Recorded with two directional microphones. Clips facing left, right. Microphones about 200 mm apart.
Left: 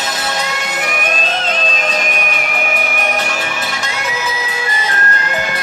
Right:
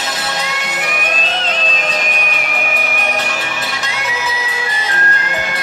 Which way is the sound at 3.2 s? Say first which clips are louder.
Left 1 dB; 45° left (ahead or behind).